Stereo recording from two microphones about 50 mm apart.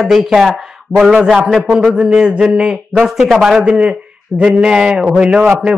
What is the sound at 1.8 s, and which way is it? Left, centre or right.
Speech, centre.